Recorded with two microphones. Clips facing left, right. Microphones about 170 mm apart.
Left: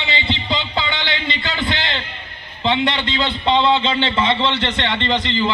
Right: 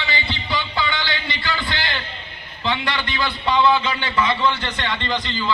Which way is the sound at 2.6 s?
20° left (ahead or behind).